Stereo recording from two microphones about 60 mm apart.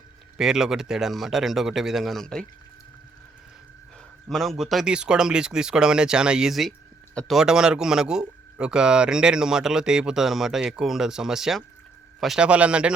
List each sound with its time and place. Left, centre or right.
0.3 s speech: centre
2.2 s speech: centre
4.3 s speech: centre
4.9 s speech: centre
6.5 s speech: centre
7.3 s speech: centre
12.4 s a man's voice: right